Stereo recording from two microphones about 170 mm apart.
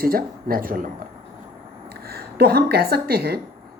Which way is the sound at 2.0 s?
65° right (ahead or behind).